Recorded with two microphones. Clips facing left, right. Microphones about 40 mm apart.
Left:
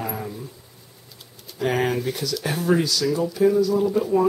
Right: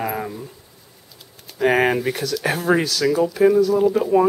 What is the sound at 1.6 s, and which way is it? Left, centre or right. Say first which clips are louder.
Speech: right 5 dB; right.